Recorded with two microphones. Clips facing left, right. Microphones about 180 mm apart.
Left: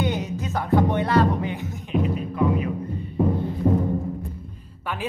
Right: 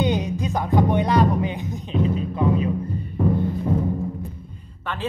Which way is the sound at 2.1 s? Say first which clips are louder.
Right 1 dB; 25° right (ahead or behind).